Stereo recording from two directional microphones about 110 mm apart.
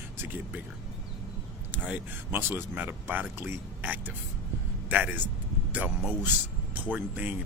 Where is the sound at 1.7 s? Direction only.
15° right (ahead or behind).